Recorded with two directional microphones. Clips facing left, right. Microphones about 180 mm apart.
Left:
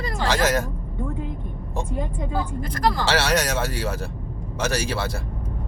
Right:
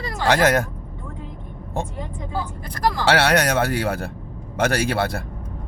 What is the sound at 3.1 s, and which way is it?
Speech, 60° right (ahead or behind).